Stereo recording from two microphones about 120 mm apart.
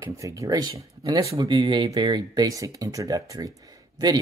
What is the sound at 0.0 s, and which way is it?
Speech, 25° right (ahead or behind).